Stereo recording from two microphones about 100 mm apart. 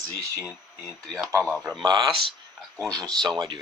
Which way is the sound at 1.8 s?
45° right (ahead or behind).